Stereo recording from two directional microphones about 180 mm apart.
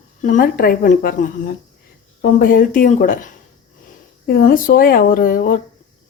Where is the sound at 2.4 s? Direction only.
50° left (ahead or behind).